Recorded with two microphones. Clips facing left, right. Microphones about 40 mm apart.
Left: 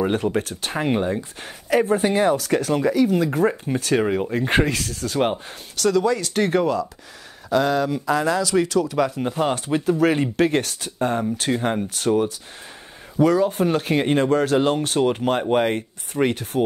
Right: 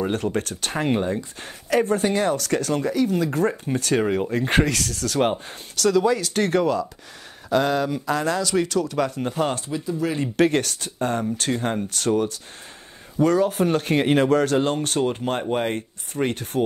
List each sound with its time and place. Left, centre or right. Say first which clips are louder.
0.0 s speech: left 3 dB; centre
2.0 s speech: left 3 dB; centre
4.4 s speech: left 1 dB; left
5.2 s speech: even; centre
9.7 s speech: left 7 dB; left
11.0 s speech: left 2 dB; centre
13.5 s speech: even; centre
14.0 s speech: right 1 dB; centre
14.4 s speech: left 2 dB; centre